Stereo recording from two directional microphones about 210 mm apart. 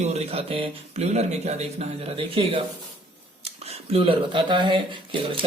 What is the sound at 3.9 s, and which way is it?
Speech, 25° right (ahead or behind).